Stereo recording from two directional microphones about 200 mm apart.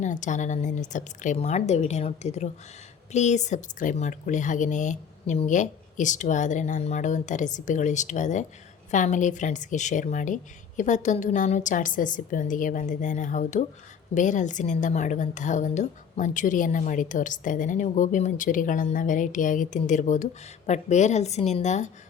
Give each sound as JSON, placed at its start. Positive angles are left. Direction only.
{"t": 0.0, "sound": "a woman's voice", "side_deg": 40}